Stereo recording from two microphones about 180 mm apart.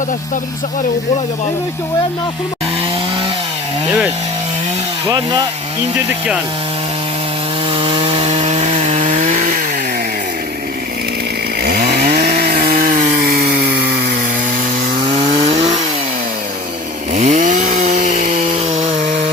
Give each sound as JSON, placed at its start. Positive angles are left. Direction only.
{"t": 7.8, "sound": "wood", "side_deg": -30}
{"t": 11.6, "sound": "chainsaw", "side_deg": -60}
{"t": 15.1, "sound": "chainsaw", "side_deg": -40}
{"t": 17.2, "sound": "chainsaw", "side_deg": -45}